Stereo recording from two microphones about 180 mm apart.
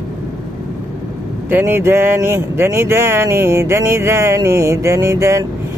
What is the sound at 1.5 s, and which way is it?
Speech, 10° right (ahead or behind).